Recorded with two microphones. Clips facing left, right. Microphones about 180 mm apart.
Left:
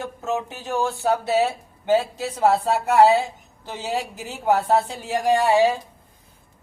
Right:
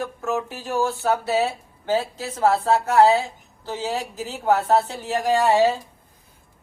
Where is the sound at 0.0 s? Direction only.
20° left (ahead or behind).